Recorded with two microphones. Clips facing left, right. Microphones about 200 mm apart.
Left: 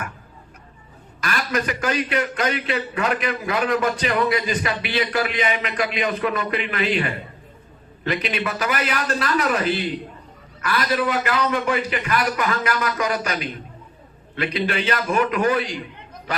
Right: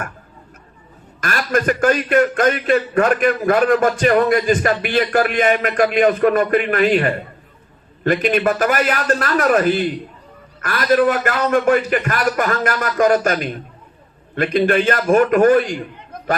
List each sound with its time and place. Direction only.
1.2 s a man's voice: 50° right (ahead or behind)